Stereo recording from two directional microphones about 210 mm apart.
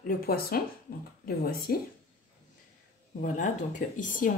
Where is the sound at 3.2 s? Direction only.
40° left (ahead or behind).